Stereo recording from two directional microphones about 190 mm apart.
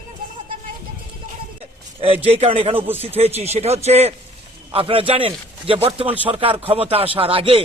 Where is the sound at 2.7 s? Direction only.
10° right (ahead or behind).